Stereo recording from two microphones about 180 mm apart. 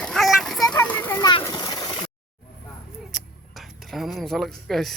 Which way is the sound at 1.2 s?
25° left (ahead or behind).